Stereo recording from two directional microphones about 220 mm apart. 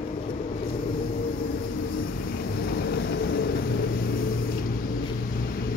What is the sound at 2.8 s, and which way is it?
Train, 45° left (ahead or behind).